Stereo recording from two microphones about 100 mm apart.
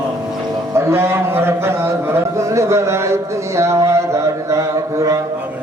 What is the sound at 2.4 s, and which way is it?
Speech, 30° right (ahead or behind).